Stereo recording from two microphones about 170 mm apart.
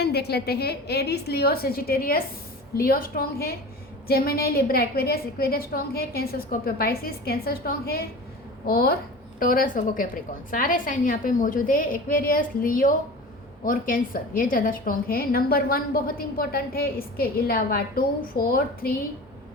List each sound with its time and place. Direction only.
0.0 s a woman's voice: 70° left (ahead or behind)